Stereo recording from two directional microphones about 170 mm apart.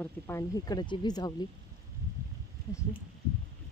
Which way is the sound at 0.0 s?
15° left (ahead or behind).